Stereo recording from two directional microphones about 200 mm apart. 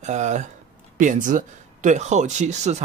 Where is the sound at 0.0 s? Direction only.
35° right (ahead or behind).